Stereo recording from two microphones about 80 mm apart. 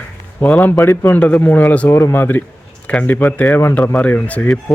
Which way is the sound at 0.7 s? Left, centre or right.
Left.